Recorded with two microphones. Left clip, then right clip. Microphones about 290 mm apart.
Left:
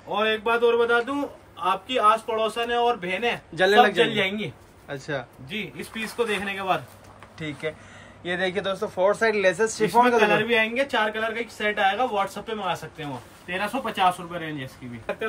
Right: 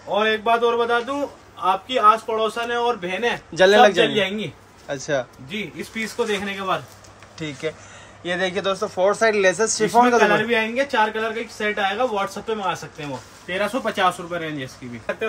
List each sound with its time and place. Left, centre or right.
0.1 s a man's voice: centre
5.5 s speech: centre